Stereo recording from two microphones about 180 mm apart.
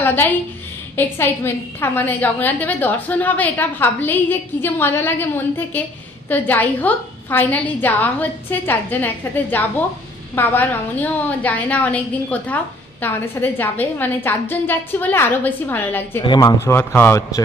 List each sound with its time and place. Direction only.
0.0 s a woman's voice: 10° left (ahead or behind)
16.2 s a woman's voice: 20° left (ahead or behind)